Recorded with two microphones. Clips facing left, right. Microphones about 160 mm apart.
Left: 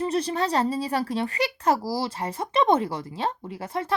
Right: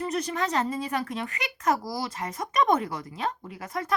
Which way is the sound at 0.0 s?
30° left (ahead or behind).